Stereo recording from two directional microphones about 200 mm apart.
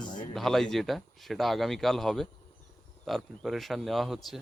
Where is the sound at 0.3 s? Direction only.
Centre (ahead or behind).